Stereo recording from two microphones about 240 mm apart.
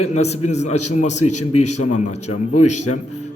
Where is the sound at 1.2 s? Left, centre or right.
Left.